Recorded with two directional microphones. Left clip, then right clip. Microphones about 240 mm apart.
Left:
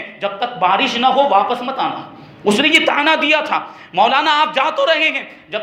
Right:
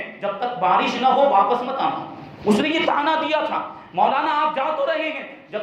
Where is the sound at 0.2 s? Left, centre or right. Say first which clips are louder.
Left 5 dB; left.